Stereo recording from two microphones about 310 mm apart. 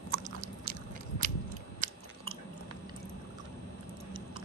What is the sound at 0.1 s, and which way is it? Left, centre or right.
Chewing, right.